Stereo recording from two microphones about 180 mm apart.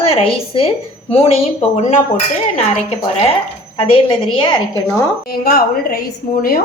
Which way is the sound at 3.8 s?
30° left (ahead or behind).